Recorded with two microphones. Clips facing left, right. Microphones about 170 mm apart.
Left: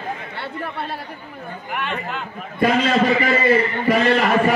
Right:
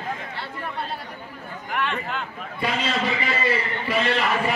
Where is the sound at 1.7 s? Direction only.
5° left (ahead or behind).